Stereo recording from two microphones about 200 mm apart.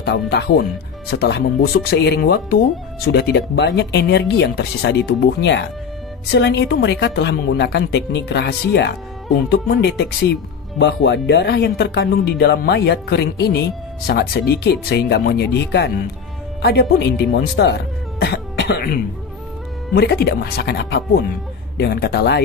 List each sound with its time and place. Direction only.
0.0 s speech: 60° left (ahead or behind)
18.2 s throat clearing: 55° left (ahead or behind)
19.9 s speech: 50° left (ahead or behind)